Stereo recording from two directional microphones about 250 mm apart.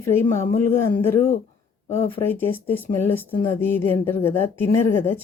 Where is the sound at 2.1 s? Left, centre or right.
Centre.